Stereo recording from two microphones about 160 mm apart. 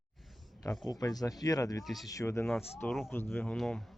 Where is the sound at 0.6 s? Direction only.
20° left (ahead or behind); by 3.8 s 5° left (ahead or behind).